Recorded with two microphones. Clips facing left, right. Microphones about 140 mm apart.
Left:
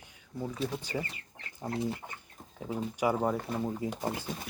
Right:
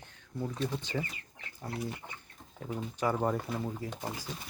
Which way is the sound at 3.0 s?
10° left (ahead or behind).